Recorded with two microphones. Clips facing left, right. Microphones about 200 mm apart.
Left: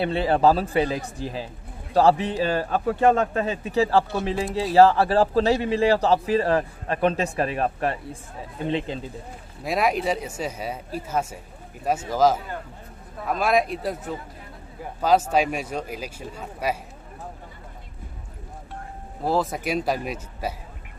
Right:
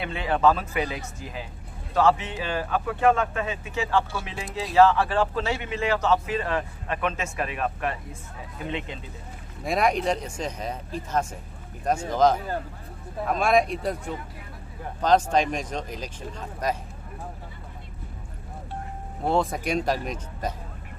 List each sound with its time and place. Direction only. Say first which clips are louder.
0.0 s a man's voice: left 3 dB; 35° left (ahead or behind)
9.6 s speech: even; centre (ahead or behind)
15.0 s speech: left 1 dB; 5° left (ahead or behind)
19.2 s speech: even; centre (ahead or behind)